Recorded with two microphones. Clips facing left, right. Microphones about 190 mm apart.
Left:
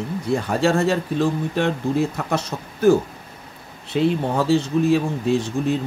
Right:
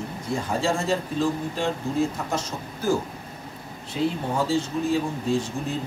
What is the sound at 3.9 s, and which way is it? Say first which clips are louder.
Speech: left 6 dB; 65° left (ahead or behind).